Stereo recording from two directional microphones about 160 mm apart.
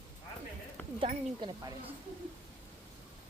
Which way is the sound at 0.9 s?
35° right (ahead or behind).